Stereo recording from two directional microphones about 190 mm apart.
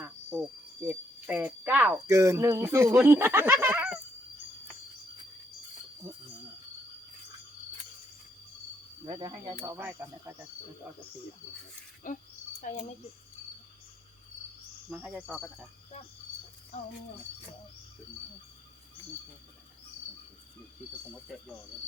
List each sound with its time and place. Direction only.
0.0 s cricket: 10° right (ahead or behind)
0.9 s speech: 10° right (ahead or behind)
9.0 s speech: 20° right (ahead or behind)
12.0 s speech: 40° left (ahead or behind)
14.8 s speech: 5° right (ahead or behind)